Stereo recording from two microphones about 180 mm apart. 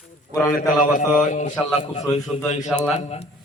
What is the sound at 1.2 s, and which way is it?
A man's voice, 40° left (ahead or behind).